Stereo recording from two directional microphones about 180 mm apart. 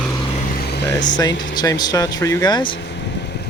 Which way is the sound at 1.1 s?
20° left (ahead or behind).